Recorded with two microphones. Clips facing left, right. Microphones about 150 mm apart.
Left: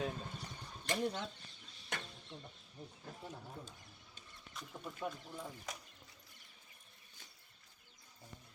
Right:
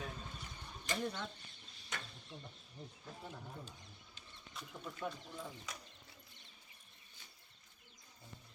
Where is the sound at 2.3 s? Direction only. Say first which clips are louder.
Even; 30° left (ahead or behind).